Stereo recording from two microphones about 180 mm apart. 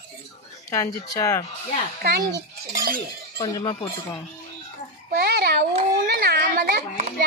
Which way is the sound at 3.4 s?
25° left (ahead or behind).